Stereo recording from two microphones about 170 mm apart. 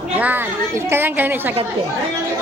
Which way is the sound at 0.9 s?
10° right (ahead or behind).